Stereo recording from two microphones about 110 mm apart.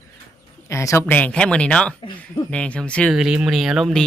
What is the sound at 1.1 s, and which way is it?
Speech, 15° left (ahead or behind).